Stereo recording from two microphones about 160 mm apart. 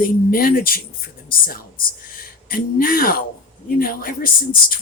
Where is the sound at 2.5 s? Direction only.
65° left (ahead or behind).